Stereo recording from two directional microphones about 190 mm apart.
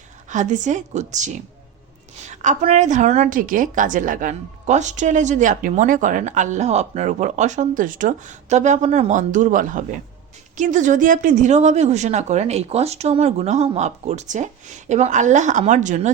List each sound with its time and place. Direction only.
0.3 s a woman's voice: 40° right (ahead or behind)